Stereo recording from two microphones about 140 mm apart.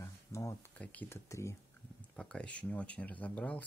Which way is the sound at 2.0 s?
5° left (ahead or behind).